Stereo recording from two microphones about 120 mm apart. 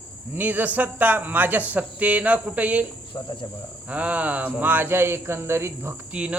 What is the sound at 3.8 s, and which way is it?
Speech, 10° right (ahead or behind).